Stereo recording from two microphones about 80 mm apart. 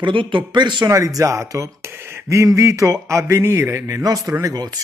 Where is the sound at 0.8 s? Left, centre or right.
Right.